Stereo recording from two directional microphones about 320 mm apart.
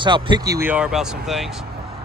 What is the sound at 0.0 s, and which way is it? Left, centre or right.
Speech, centre.